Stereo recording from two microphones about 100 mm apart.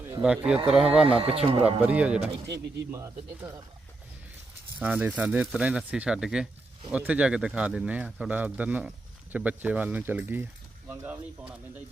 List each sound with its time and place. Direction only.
0.2 s speech: 10° right (ahead or behind)
1.0 s speech: 70° right (ahead or behind)
1.8 s speech: 15° right (ahead or behind)
3.4 s speech: 10° right (ahead or behind)
4.8 s speech: 15° right (ahead or behind)